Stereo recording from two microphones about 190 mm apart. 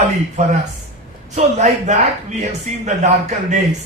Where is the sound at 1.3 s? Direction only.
40° right (ahead or behind).